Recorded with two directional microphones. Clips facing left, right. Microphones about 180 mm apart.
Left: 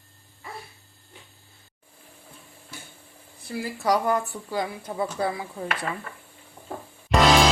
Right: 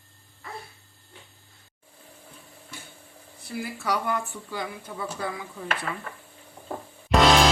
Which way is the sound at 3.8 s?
40° left (ahead or behind).